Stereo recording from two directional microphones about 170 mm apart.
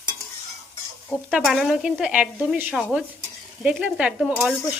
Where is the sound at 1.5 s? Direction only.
Centre (ahead or behind).